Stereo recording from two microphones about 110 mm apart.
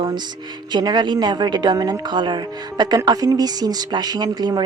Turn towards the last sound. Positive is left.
turn(degrees=-40)  # may be behind; listen again after turning